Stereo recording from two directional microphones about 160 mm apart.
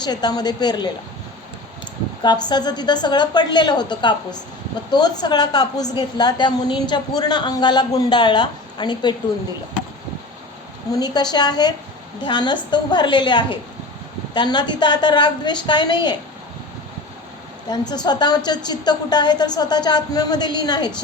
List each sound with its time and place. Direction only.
0.0 s a woman's voice: 25° left (ahead or behind)
2.2 s a woman's voice: 25° left (ahead or behind)
10.9 s a woman's voice: 25° left (ahead or behind)
17.7 s a woman's voice: 25° left (ahead or behind)